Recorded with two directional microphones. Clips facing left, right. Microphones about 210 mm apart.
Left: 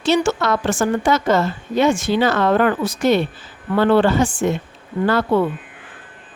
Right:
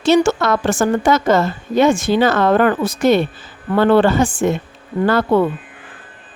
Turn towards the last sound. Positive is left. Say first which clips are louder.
# right 2 dB
turn(degrees=-50)  # may be behind; listen again after turning